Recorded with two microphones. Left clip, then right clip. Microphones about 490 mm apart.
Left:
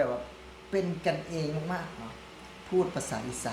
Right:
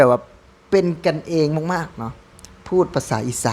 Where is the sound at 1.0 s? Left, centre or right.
Right.